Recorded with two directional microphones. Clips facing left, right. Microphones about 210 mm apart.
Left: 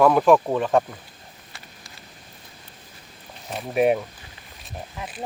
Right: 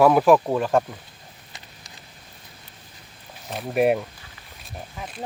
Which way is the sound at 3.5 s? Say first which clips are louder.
Even; centre (ahead or behind).